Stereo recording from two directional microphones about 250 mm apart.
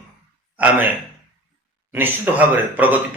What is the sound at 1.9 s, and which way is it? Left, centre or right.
Speech, centre.